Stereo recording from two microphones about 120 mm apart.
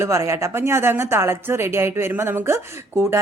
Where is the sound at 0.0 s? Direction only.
25° right (ahead or behind).